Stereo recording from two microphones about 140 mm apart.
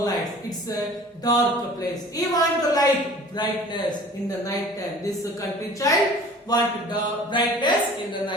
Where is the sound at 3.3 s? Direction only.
30° left (ahead or behind).